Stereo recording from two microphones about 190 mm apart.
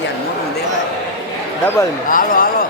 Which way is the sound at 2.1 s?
50° left (ahead or behind).